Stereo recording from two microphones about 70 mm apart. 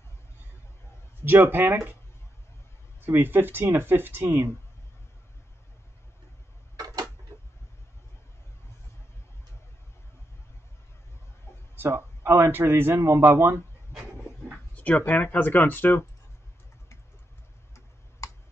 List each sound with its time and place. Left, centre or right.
1.2 s a man's voice: right
3.1 s a man's voice: right
11.7 s a man's voice: right
14.8 s speech: left